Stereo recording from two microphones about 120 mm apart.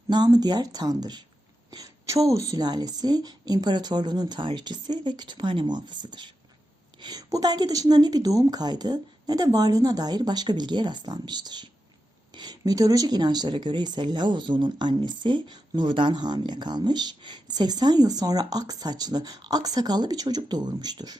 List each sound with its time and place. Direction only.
0.1 s speech: 35° right (ahead or behind)